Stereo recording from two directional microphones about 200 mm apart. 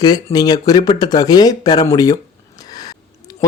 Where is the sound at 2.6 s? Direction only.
20° left (ahead or behind).